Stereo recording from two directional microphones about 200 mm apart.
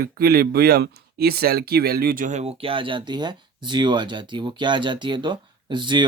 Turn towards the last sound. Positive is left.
turn(degrees=-25)  # may be behind; listen again after turning